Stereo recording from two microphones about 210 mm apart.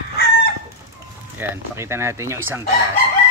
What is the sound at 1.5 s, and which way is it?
Speech, 10° right (ahead or behind).